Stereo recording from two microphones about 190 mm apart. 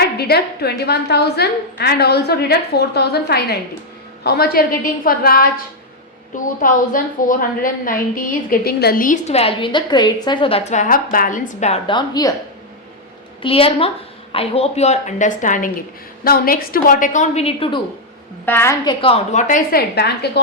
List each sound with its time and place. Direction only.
0.0 s a woman's voice: 55° left (ahead or behind); by 12.3 s 20° left (ahead or behind)
13.4 s a woman's voice: 30° left (ahead or behind)
18.4 s a woman's voice: 15° left (ahead or behind)
19.0 s a woman's voice: 35° left (ahead or behind); by 20.4 s 60° left (ahead or behind)